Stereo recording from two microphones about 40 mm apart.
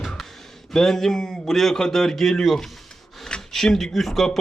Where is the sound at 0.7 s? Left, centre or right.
Centre.